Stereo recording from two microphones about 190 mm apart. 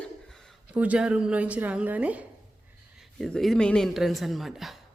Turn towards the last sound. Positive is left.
turn(degrees=0)  # may be behind; listen again after turning